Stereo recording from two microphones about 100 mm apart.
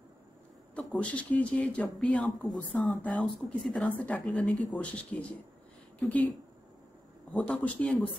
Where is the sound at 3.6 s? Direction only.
10° left (ahead or behind).